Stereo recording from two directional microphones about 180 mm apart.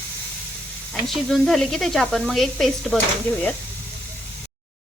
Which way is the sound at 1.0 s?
Centre (ahead or behind).